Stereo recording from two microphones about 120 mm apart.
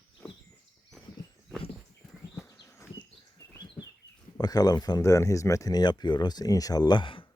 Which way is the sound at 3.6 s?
35° left (ahead or behind).